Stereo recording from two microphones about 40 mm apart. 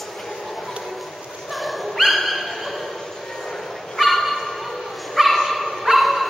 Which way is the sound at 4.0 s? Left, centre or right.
Centre.